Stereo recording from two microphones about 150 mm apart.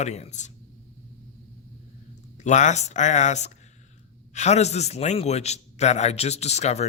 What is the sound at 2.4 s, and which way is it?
A man's voice, 50° left (ahead or behind).